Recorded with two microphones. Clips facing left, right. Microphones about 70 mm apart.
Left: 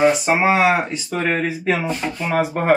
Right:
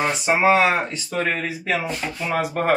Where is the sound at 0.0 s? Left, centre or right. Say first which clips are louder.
Left 3 dB; centre.